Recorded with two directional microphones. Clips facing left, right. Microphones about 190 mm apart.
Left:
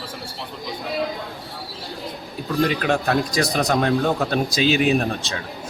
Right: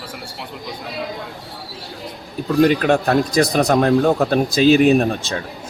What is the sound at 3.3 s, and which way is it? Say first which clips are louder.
Speech: right 5 dB; 45° right (ahead or behind).